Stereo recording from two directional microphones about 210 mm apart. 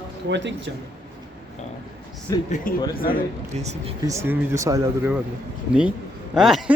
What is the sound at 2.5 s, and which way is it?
Speech, 40° left (ahead or behind).